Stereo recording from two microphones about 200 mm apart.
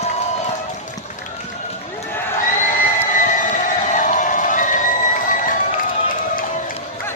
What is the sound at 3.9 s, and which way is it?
Run, 40° left (ahead or behind).